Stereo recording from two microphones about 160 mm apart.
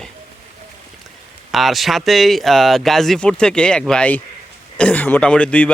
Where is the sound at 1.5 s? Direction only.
Centre (ahead or behind).